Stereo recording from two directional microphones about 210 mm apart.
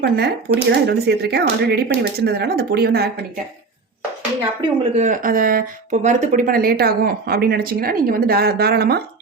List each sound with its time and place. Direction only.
0.0 s speech: 55° right (ahead or behind)
4.9 s speech: 35° right (ahead or behind)